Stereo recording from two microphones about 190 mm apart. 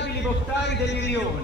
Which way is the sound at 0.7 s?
65° left (ahead or behind).